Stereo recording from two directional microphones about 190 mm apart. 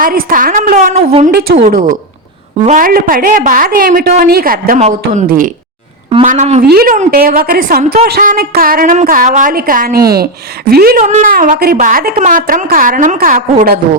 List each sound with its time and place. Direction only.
0.0 s a woman's voice: 50° right (ahead or behind)
4.8 s a man's voice: 35° right (ahead or behind)
5.2 s a woman's voice: 50° right (ahead or behind)
6.2 s a man's voice: 35° right (ahead or behind)
6.6 s a woman's voice: 50° right (ahead or behind)
11.0 s a woman's voice: 40° right (ahead or behind)